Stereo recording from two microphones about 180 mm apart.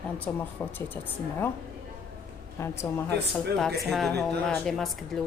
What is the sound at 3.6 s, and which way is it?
Speech, centre (ahead or behind).